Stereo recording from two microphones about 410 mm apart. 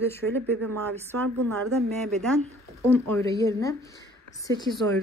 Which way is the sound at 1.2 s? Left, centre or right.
Right.